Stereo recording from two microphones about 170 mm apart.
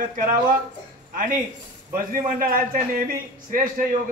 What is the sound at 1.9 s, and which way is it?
A man's voice, 55° right (ahead or behind).